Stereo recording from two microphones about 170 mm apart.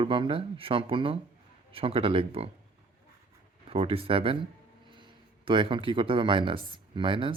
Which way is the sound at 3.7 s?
35° right (ahead or behind).